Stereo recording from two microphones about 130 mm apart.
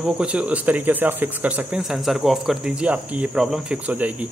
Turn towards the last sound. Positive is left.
turn(degrees=-10)  # may be behind; listen again after turning